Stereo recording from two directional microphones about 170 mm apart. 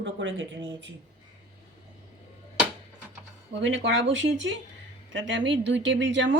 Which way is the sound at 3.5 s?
90° right.